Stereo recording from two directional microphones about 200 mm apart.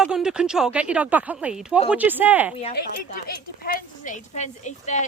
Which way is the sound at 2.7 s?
45° left (ahead or behind).